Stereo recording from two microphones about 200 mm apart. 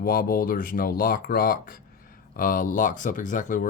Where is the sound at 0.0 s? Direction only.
45° left (ahead or behind).